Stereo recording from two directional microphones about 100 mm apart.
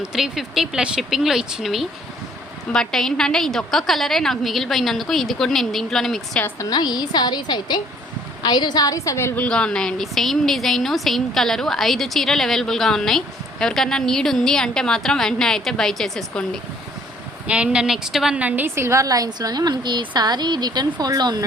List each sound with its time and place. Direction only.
0.0 s a woman's voice: 5° right (ahead or behind)
6.6 s a woman's voice: 40° left (ahead or behind); by 9.4 s 25° left (ahead or behind)
9.4 s a woman's voice: 10° left (ahead or behind)
17.4 s speech: 10° right (ahead or behind)
18.3 s a woman's voice: 15° right (ahead or behind); by 21.4 s 45° right (ahead or behind)